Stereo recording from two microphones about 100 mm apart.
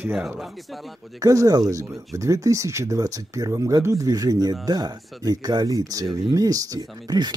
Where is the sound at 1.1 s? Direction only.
35° right (ahead or behind).